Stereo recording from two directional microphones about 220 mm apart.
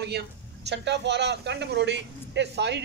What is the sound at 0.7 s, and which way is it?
A man's voice, 50° right (ahead or behind).